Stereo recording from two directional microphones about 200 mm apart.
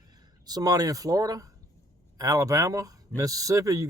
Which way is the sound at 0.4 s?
20° right (ahead or behind).